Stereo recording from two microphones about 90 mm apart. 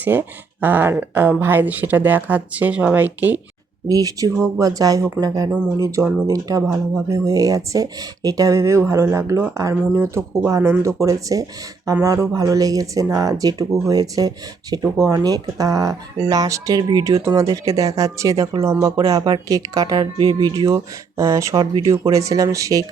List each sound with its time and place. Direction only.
0.0 s speech: 20° right (ahead or behind)
3.8 s speech: 40° right (ahead or behind); by 10.9 s 25° right (ahead or behind)
11.0 s speech: 40° right (ahead or behind)
18.9 s speech: 45° right (ahead or behind)
20.1 s speech: 65° right (ahead or behind)
20.6 s speech: 35° right (ahead or behind)